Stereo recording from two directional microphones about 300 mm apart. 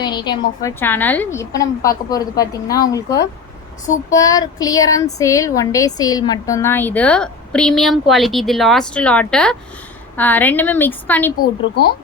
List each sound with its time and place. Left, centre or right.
0.0 s a woman's voice: centre
11.3 s a woman's voice: left